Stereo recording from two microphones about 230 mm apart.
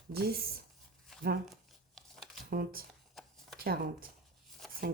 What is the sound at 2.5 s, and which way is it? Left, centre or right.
Speech, right.